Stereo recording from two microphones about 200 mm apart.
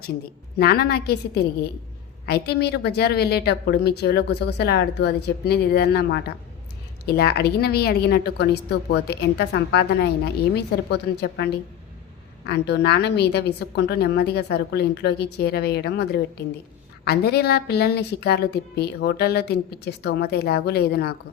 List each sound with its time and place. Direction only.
0.6 s a woman's voice: 50° left (ahead or behind)
2.2 s a woman's voice: 50° left (ahead or behind)